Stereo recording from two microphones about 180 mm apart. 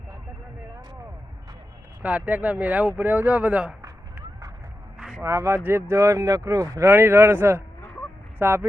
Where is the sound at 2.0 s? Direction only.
10° right (ahead or behind).